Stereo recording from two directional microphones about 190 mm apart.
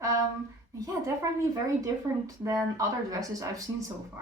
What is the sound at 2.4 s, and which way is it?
A woman's voice, 20° right (ahead or behind).